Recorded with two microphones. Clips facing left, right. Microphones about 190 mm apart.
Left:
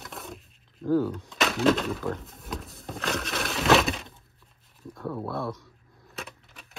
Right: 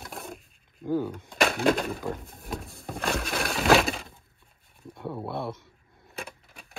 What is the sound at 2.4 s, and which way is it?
Breaking, centre (ahead or behind).